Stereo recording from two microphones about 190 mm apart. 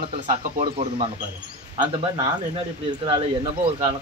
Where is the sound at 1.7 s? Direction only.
25° right (ahead or behind).